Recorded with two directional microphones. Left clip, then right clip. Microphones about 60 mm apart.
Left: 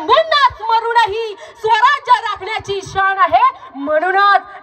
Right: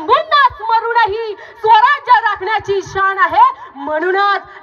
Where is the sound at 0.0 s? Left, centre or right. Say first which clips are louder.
Even; left.